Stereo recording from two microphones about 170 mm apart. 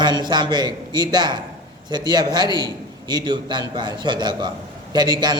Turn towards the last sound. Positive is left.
turn(degrees=-25)  # may be behind; listen again after turning